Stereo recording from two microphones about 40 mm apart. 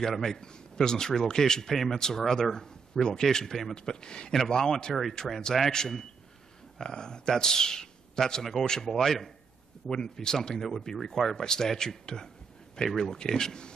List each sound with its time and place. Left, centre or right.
0.1 s speech: centre
4.3 s speech: centre